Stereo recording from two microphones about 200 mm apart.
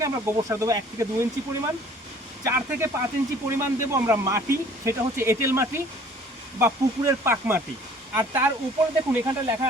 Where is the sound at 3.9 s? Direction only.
15° right (ahead or behind).